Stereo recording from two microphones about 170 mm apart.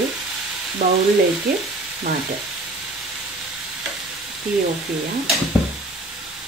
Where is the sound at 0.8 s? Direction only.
60° right (ahead or behind).